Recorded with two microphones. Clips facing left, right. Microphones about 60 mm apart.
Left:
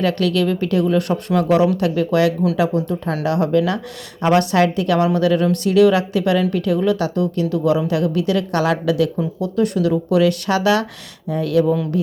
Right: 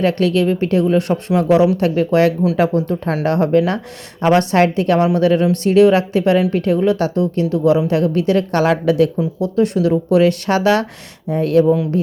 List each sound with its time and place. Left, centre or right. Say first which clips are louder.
0.0 s speech: right 3 dB; right
11.6 s speech: right 4 dB; right